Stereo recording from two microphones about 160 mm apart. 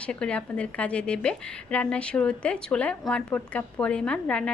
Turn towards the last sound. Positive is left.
turn(degrees=5)  # may be behind; listen again after turning